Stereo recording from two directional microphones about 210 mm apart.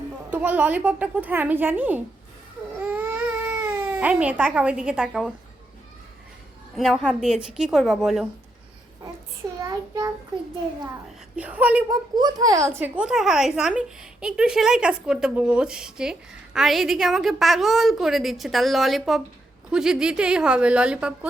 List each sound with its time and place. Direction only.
0.3 s a woman's voice: 5° right (ahead or behind)
2.8 s baby cry: 10° right (ahead or behind)
6.7 s speech: centre (ahead or behind)
9.6 s a woman's voice: 15° right (ahead or behind)
11.3 s a woman's voice: 5° right (ahead or behind)
12.1 s speech: 20° right (ahead or behind)